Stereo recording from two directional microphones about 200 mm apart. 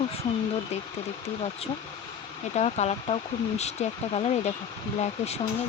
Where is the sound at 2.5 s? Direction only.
30° left (ahead or behind).